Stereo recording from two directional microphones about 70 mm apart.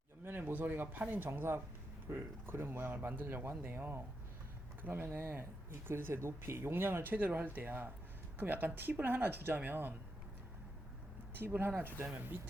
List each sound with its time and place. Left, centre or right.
0.3 s speech: right
11.4 s speech: right